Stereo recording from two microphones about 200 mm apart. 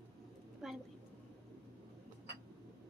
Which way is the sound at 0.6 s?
Centre (ahead or behind).